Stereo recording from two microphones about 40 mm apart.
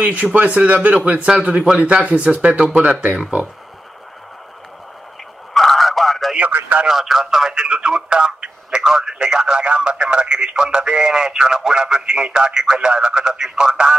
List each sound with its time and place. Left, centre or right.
0.0 s speech: right
5.5 s a sound: centre
6.9 s speech: centre